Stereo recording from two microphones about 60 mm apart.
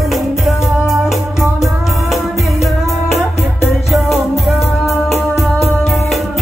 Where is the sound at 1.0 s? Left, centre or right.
Centre.